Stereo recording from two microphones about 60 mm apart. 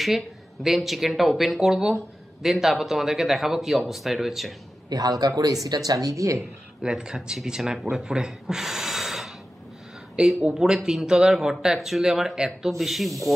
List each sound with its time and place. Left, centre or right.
0.7 s speech: centre
5.2 s speech: right
6.8 s speech: centre
10.1 s speech: centre